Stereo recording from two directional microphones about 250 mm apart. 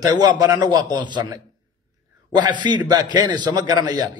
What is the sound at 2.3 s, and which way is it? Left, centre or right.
A man's voice, centre.